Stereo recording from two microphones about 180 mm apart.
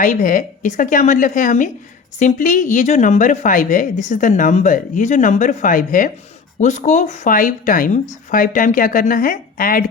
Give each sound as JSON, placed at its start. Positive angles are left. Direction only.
{"t": 0.0, "sound": "speech", "side_deg": 45}